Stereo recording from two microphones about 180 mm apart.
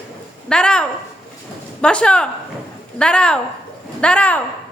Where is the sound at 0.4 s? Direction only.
5° left (ahead or behind).